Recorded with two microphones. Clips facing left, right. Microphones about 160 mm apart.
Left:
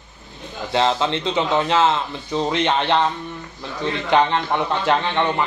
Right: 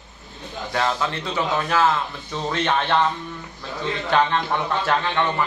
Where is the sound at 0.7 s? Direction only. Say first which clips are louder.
Left 5 dB; 25° left (ahead or behind).